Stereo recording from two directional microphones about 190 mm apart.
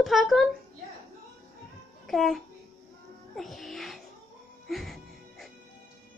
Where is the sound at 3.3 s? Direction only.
Centre (ahead or behind).